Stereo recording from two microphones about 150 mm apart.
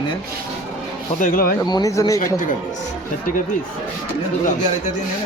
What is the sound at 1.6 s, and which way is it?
Speech, 25° left (ahead or behind).